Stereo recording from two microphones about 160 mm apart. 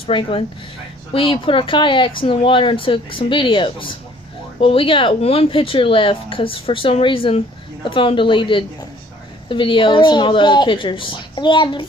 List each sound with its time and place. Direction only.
0.0 s speech: 35° left (ahead or behind)